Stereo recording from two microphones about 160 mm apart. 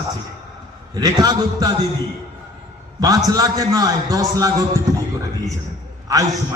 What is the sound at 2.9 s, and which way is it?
A man's voice, 20° right (ahead or behind).